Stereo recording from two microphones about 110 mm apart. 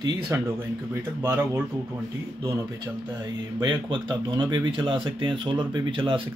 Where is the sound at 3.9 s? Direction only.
45° right (ahead or behind).